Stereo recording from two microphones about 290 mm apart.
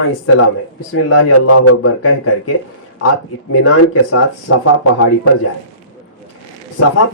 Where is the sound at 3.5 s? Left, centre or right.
Left.